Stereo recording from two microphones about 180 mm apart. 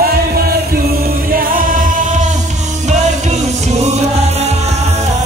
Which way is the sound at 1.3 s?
50° right (ahead or behind).